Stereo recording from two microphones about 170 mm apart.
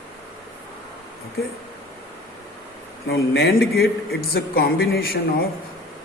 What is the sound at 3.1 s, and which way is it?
Speech, 70° left (ahead or behind).